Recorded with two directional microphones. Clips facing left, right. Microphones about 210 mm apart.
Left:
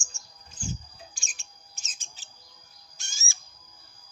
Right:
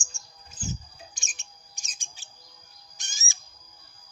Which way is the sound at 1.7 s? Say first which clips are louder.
Right 1 dB; 15° right (ahead or behind).